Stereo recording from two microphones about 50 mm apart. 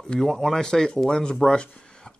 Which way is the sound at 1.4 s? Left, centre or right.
Centre.